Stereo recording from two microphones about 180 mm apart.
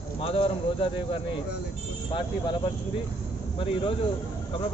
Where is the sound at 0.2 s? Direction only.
30° left (ahead or behind).